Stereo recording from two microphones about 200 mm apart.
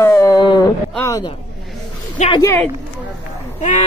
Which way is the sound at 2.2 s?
25° left (ahead or behind).